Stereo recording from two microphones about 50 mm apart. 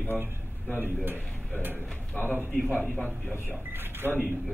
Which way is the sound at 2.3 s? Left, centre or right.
Right.